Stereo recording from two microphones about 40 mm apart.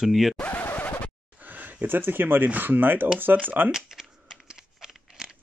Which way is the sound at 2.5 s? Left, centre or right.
Right.